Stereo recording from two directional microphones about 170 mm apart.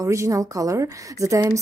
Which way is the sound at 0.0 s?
20° right (ahead or behind).